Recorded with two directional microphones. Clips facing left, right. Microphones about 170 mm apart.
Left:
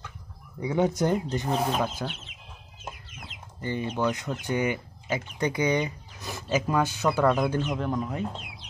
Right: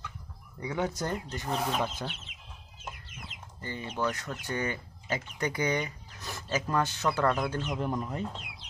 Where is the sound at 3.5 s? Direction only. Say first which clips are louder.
Left 6 dB; 20° left (ahead or behind).